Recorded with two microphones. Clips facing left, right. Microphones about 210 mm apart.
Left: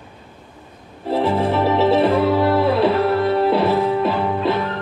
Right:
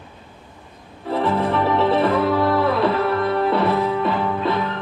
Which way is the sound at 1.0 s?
30° left (ahead or behind).